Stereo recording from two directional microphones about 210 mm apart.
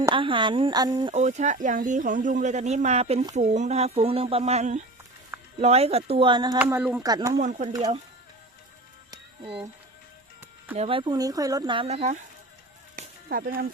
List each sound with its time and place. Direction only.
0.1 s speech: 25° right (ahead or behind)
1.1 s speech: 35° right (ahead or behind)
6.6 s speech: 10° right (ahead or behind)
7.0 s speech: 20° right (ahead or behind)
10.8 s speech: 25° right (ahead or behind)
13.0 s a sound: 45° right (ahead or behind)